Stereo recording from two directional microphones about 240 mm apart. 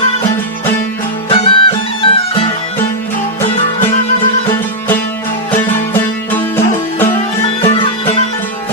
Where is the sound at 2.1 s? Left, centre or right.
Left.